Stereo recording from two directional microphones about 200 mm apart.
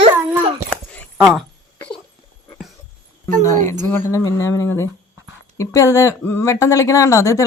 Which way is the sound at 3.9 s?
15° left (ahead or behind).